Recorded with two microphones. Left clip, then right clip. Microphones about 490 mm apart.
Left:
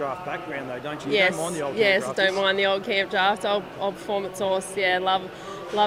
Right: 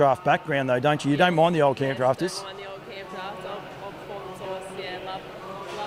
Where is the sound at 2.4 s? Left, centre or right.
Left.